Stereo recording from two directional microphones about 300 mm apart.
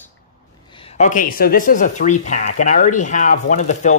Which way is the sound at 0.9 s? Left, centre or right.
Left.